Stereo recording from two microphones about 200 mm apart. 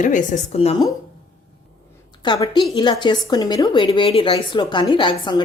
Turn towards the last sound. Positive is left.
turn(degrees=25)  # may be behind; listen again after turning